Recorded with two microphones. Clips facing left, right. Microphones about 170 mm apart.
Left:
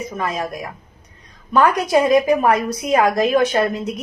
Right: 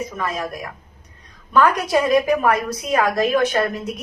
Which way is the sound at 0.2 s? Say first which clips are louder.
Left 4 dB; 20° left (ahead or behind).